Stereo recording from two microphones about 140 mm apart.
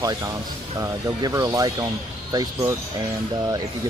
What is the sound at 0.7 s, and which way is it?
Speech, 25° right (ahead or behind).